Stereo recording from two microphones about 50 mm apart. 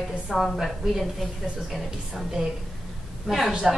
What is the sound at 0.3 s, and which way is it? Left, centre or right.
Speech, centre.